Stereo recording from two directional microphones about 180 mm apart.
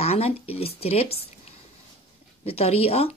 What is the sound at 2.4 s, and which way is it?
Speech, 35° left (ahead or behind).